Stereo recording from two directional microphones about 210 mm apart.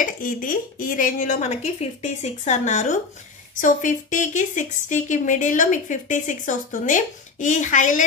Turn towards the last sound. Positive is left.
turn(degrees=35)  # may be behind; listen again after turning